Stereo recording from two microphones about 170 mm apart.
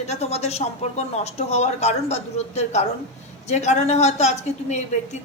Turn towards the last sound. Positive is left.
turn(degrees=40)  # may be behind; listen again after turning